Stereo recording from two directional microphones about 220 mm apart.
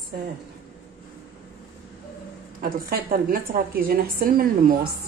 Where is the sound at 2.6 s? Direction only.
40° right (ahead or behind).